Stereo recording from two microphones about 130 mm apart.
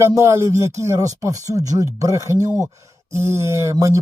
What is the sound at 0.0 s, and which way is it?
Speech, 20° right (ahead or behind).